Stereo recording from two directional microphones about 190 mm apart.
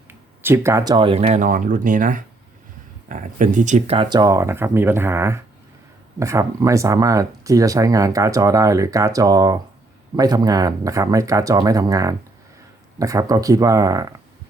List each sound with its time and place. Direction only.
0.1 s speech: 10° right (ahead or behind)